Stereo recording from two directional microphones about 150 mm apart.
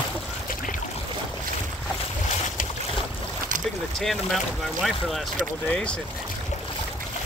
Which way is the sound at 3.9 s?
Centre (ahead or behind).